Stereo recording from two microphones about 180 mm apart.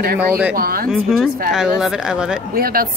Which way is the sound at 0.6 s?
55° right (ahead or behind).